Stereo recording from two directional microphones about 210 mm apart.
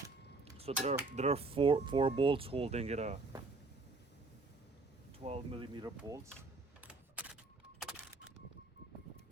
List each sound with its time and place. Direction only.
0.5 s speech: 30° right (ahead or behind)
5.2 s speech: 25° right (ahead or behind)
6.8 s a sound: 5° right (ahead or behind)